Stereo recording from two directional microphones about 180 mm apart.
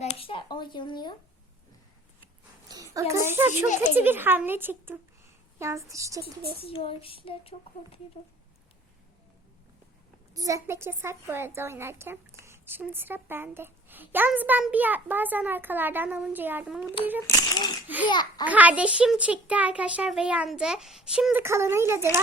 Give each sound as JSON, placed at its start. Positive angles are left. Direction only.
{"t": 0.0, "sound": "a sound", "side_deg": 30}
{"t": 2.6, "sound": "a woman's voice", "side_deg": -20}
{"t": 6.6, "sound": "a sound", "side_deg": 30}
{"t": 10.3, "sound": "a woman's voice", "side_deg": -20}
{"t": 17.2, "sound": "a child's voice", "side_deg": 20}
{"t": 17.8, "sound": "a woman's voice", "side_deg": -10}
{"t": 18.1, "sound": "a child's voice", "side_deg": 25}
{"t": 18.4, "sound": "a woman's voice", "side_deg": -10}
{"t": 21.4, "sound": "a woman's voice", "side_deg": -15}